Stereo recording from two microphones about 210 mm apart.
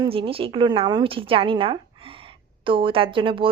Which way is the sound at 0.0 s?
25° right (ahead or behind).